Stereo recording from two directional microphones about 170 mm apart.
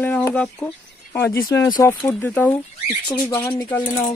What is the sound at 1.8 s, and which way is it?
Speech, 20° left (ahead or behind).